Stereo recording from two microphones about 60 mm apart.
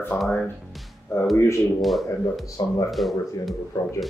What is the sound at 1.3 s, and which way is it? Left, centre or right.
Speech, left.